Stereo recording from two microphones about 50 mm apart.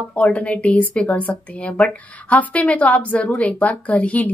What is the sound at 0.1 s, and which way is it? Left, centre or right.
A woman's voice, left.